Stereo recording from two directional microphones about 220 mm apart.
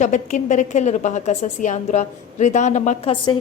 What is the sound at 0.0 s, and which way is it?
A woman's voice, 35° left (ahead or behind).